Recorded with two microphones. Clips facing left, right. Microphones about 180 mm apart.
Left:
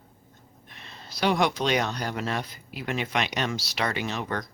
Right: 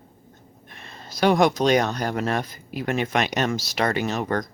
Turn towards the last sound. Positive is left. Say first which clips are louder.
# right 6 dB
turn(degrees=-45)  # may be behind; listen again after turning